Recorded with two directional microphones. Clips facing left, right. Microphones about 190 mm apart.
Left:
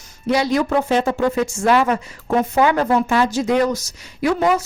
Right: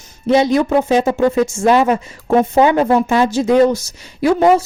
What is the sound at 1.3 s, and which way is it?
A woman's voice, 25° right (ahead or behind).